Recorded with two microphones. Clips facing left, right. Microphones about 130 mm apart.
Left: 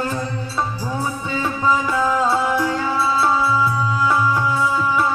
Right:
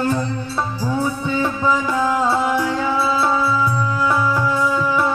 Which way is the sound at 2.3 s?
20° right (ahead or behind).